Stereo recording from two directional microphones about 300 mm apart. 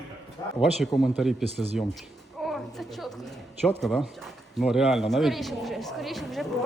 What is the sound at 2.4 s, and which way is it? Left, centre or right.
Speech, centre.